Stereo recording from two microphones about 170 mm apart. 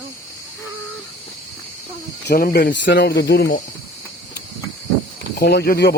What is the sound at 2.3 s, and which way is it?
Speech, 65° left (ahead or behind).